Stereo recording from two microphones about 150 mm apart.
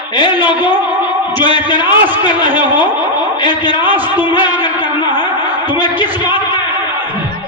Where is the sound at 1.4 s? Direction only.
30° left (ahead or behind).